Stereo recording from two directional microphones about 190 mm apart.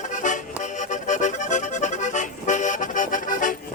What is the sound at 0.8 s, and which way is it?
Accordion, 40° left (ahead or behind).